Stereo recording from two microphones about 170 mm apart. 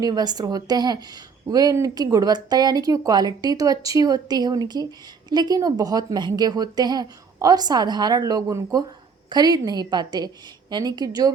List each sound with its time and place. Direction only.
0.0 s a woman's voice: 25° right (ahead or behind)